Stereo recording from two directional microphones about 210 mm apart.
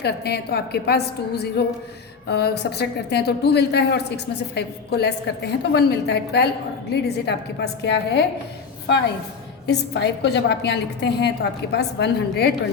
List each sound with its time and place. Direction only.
0.0 s a woman's voice: 50° left (ahead or behind)
9.6 s a woman's voice: 55° left (ahead or behind)